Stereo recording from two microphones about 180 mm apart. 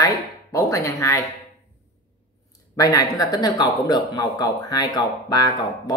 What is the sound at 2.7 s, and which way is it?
Speech, 20° left (ahead or behind).